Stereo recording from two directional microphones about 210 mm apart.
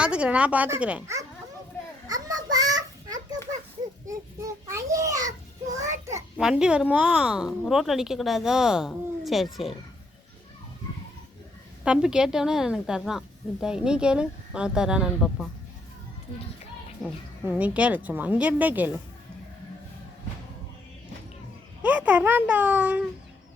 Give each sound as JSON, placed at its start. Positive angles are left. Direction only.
{"t": 0.0, "sound": "speech", "side_deg": -5}
{"t": 2.0, "sound": "a sound", "side_deg": -15}
{"t": 5.7, "sound": "child singing", "side_deg": -15}
{"t": 6.3, "sound": "a woman's voice", "side_deg": -5}
{"t": 11.9, "sound": "a woman's voice", "side_deg": -5}
{"t": 17.0, "sound": "speech", "side_deg": -5}
{"t": 21.8, "sound": "speech", "side_deg": -5}